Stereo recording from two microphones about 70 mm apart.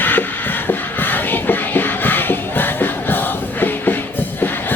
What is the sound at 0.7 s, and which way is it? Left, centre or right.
Music, left.